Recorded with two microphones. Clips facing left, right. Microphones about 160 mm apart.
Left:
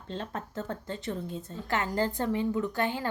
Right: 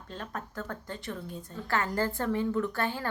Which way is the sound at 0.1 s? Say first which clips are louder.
Left 3 dB; 25° left (ahead or behind).